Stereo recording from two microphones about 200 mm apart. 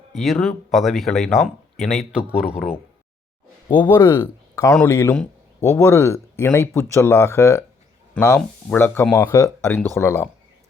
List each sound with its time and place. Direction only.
0.1 s speech: centre (ahead or behind)
3.8 s speech: 20° left (ahead or behind)